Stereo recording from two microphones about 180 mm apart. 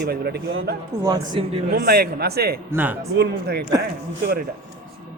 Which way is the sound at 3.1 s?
65° right (ahead or behind).